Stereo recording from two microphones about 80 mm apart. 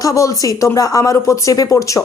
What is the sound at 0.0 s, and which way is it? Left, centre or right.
A woman's voice, left.